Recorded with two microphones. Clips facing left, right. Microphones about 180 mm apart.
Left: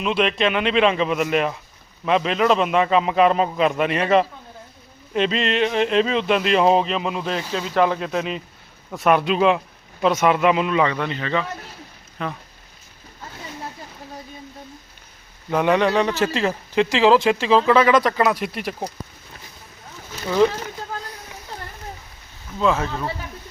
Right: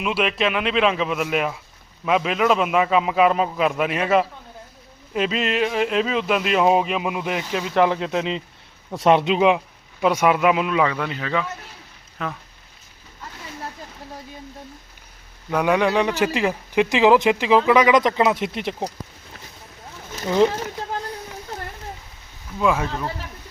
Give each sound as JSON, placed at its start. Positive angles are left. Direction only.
{"t": 0.0, "sound": "a man's voice", "side_deg": -5}
{"t": 15.4, "sound": "a man's voice", "side_deg": 0}
{"t": 15.8, "sound": "speech", "side_deg": -10}
{"t": 20.2, "sound": "speech", "side_deg": -20}
{"t": 22.5, "sound": "speech", "side_deg": -10}